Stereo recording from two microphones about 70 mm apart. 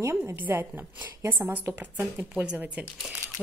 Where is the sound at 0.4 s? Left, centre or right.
Right.